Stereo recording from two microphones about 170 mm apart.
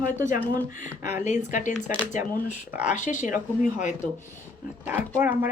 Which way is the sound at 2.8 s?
50° left (ahead or behind).